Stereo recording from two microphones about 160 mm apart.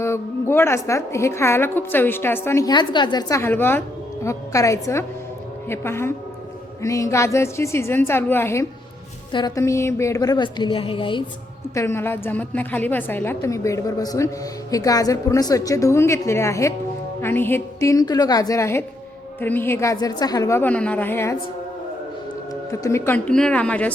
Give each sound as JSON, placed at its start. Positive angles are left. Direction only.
{"t": 0.0, "sound": "a woman's voice", "side_deg": 15}
{"t": 11.7, "sound": "a woman's voice", "side_deg": 15}
{"t": 22.7, "sound": "a woman's voice", "side_deg": 20}